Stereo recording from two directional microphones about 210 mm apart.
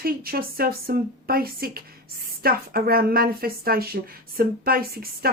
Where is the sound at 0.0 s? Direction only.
45° right (ahead or behind).